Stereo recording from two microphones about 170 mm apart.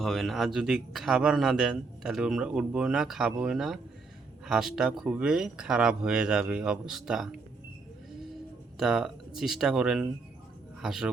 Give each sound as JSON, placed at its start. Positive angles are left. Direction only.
{"t": 0.0, "sound": "speech", "side_deg": 0}
{"t": 8.8, "sound": "speech", "side_deg": 0}